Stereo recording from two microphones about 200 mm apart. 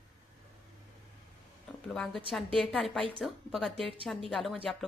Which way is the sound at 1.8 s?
5° left (ahead or behind).